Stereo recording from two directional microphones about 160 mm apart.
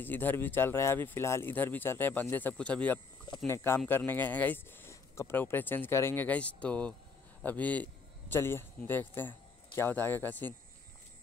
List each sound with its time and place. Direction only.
0.0 s a man's voice: 10° left (ahead or behind)